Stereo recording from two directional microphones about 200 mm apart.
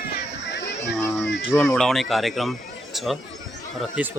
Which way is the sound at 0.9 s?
15° left (ahead or behind).